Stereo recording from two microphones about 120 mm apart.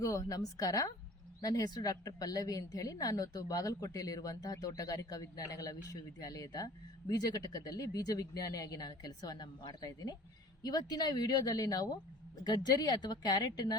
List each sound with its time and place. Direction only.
0.0 s a woman's voice: 25° left (ahead or behind)